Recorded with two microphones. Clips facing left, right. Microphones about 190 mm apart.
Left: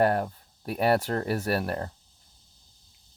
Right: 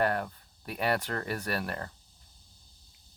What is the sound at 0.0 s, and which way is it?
Speech, 40° left (ahead or behind).